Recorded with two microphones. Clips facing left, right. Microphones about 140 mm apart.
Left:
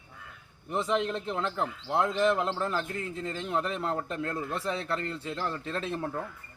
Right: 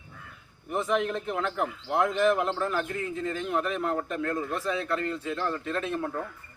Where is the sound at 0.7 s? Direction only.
30° left (ahead or behind).